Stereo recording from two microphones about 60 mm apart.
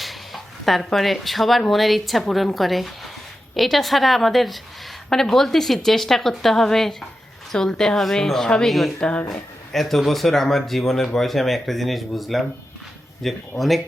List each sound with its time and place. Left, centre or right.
0.0 s a woman's voice: centre
9.3 s speech: centre